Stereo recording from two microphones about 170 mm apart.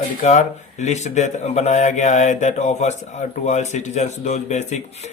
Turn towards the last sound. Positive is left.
turn(degrees=40)  # may be behind; listen again after turning